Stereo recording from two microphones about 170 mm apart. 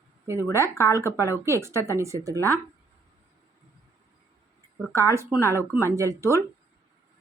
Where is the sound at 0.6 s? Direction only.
15° left (ahead or behind).